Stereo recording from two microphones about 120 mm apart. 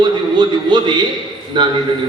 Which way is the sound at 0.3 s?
40° right (ahead or behind).